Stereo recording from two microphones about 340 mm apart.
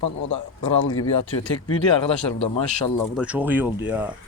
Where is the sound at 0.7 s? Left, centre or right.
Left.